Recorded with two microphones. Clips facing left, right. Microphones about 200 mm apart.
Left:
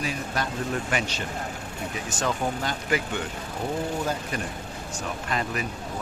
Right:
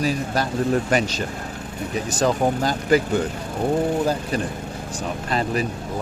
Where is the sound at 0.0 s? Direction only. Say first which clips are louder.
Right 7 dB; 35° right (ahead or behind).